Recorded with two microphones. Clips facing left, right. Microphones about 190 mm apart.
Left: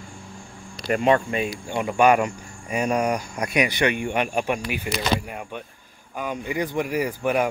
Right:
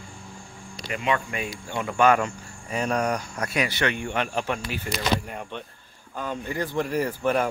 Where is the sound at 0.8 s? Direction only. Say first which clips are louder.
Left 7 dB; 45° left (ahead or behind).